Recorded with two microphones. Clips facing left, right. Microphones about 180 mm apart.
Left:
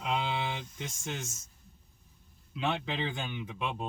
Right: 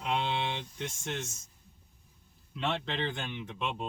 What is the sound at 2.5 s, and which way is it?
Speech, centre (ahead or behind).